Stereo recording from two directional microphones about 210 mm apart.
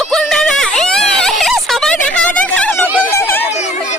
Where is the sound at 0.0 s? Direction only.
Centre (ahead or behind).